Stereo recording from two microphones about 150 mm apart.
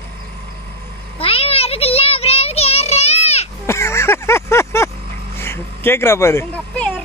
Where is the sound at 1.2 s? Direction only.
40° left (ahead or behind).